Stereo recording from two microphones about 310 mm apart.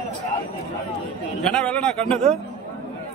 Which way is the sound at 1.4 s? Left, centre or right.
Centre.